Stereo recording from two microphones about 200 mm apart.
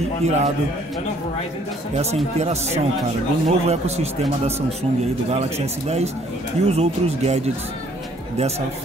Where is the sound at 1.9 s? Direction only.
35° right (ahead or behind).